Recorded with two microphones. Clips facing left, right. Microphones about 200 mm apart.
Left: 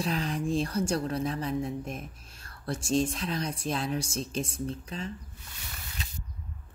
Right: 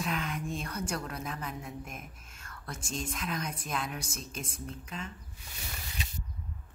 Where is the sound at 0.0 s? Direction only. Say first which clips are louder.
Left 5 dB; 35° left (ahead or behind).